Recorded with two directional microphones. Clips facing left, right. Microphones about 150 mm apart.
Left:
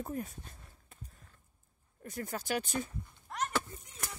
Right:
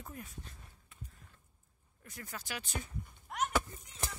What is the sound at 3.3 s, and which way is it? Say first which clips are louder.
Chop: right 1 dB; 5° right (ahead or behind).